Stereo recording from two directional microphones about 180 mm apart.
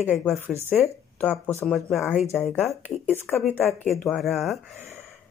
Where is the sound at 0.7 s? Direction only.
Centre (ahead or behind).